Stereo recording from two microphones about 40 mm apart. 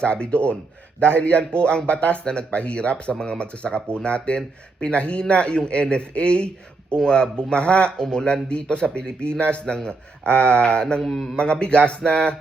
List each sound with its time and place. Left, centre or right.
0.0 s a man's voice: left
11.0 s a man's voice: centre
11.3 s a man's voice: left